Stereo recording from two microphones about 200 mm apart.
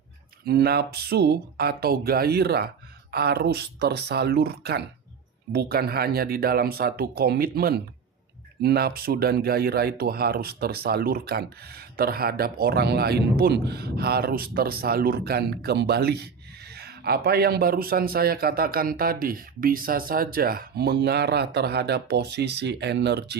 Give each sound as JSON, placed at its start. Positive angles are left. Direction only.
{"t": 0.4, "sound": "speech", "side_deg": -55}